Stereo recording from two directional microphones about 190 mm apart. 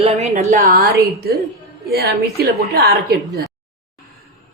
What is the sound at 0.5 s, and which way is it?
A woman's voice, 55° right (ahead or behind).